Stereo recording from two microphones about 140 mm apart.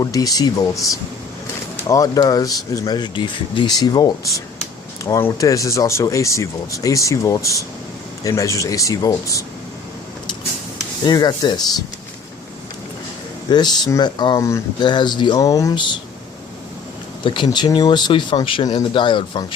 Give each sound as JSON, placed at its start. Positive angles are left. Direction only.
{"t": 0.0, "sound": "speech", "side_deg": 25}
{"t": 11.0, "sound": "speech", "side_deg": 30}
{"t": 13.5, "sound": "speech", "side_deg": 30}
{"t": 17.2, "sound": "speech", "side_deg": 35}